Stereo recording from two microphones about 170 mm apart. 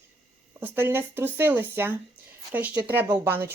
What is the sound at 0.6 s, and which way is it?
A woman's voice, 10° right (ahead or behind).